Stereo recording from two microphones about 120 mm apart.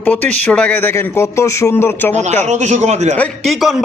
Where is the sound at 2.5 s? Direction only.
75° right (ahead or behind).